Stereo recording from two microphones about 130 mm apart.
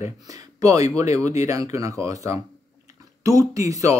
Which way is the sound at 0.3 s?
25° right (ahead or behind).